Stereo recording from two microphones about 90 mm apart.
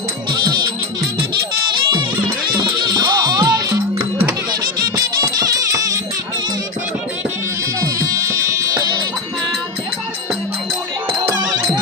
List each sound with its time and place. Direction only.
0.3 s music: 55° right (ahead or behind)
1.7 s music: 60° right (ahead or behind)
4.9 s music: 40° right (ahead or behind)
7.9 s music: 40° right (ahead or behind)
11.3 s music: 50° right (ahead or behind)